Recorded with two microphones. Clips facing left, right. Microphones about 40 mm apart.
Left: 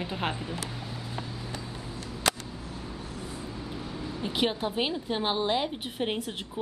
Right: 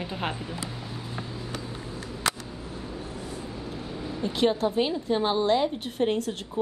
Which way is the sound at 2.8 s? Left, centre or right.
Centre.